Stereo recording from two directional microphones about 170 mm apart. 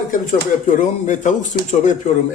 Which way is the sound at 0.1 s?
50° left (ahead or behind).